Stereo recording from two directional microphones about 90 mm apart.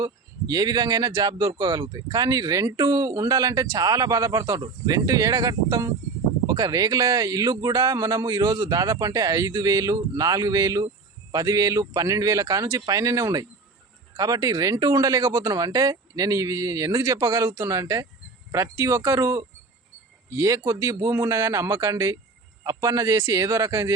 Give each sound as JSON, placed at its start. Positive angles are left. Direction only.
{"t": 0.0, "sound": "speech", "side_deg": -45}